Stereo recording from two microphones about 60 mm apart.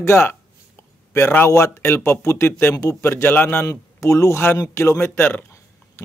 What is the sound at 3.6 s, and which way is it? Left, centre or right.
Speech, left.